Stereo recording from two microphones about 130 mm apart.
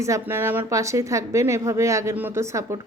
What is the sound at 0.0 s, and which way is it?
Speech, 20° right (ahead or behind).